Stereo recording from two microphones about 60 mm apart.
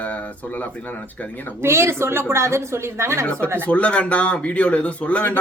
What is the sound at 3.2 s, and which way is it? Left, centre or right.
Speech, left.